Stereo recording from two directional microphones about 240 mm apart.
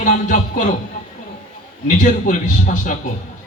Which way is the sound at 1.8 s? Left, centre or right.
Left.